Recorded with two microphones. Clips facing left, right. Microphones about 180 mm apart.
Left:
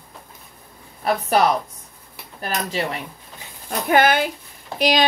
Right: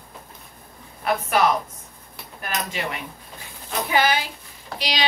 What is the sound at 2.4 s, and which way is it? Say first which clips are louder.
Speech: left 4 dB; 35° left (ahead or behind).